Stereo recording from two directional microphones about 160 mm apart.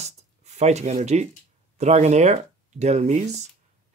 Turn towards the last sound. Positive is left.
turn(degrees=-45)  # may be behind; listen again after turning